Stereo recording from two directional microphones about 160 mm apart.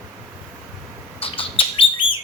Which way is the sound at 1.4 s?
35° left (ahead or behind).